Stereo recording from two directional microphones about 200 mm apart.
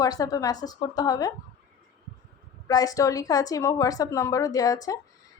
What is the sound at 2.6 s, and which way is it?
A woman's voice, 20° left (ahead or behind).